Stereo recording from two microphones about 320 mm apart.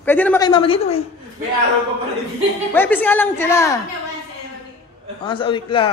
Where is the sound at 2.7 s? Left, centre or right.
Centre.